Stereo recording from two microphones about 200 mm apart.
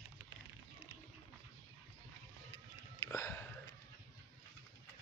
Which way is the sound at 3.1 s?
15° left (ahead or behind).